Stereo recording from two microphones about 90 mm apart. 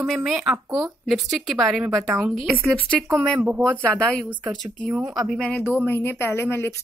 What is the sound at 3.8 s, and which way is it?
Speech, 10° left (ahead or behind).